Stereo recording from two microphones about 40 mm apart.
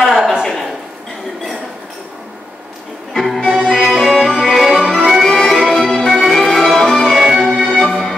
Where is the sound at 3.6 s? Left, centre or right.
Centre.